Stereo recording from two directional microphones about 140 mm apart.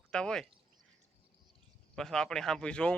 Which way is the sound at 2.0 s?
5° left (ahead or behind).